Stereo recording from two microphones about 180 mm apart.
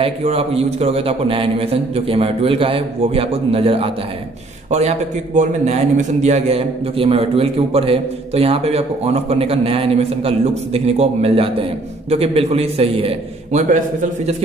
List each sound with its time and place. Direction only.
0.0 s a man's voice: 30° right (ahead or behind)